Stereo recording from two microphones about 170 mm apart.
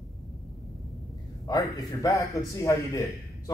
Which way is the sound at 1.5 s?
20° left (ahead or behind).